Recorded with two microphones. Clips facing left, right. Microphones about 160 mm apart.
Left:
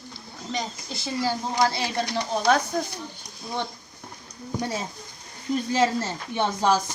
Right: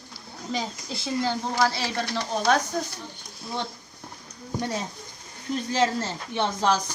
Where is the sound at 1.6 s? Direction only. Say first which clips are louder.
Left 2 dB; 15° left (ahead or behind).